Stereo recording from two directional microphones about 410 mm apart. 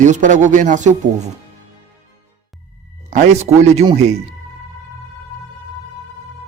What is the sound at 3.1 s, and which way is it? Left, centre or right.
Speech, centre.